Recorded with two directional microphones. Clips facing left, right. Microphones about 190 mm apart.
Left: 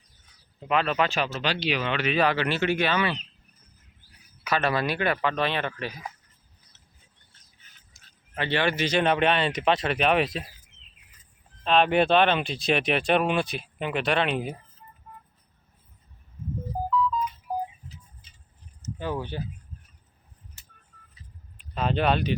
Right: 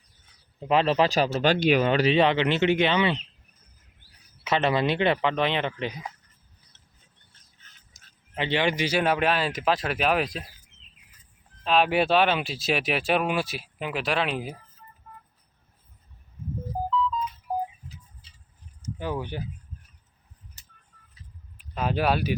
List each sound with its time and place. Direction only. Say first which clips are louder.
0.7 s speech: right 3 dB; 30° right (ahead or behind)
4.4 s speech: right 2 dB; 20° right (ahead or behind)
7.9 s a sound: even; 40° right (ahead or behind)
8.4 s speech: right 1 dB; 15° right (ahead or behind); by 10.4 s centre (ahead or behind)
11.6 s speech: left 1 dB; 5° right (ahead or behind)
18.8 s speech: even; 10° right (ahead or behind)
21.8 s speech: even; 5° right (ahead or behind)